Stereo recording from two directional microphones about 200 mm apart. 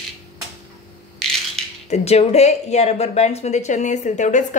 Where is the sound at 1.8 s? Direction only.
35° left (ahead or behind).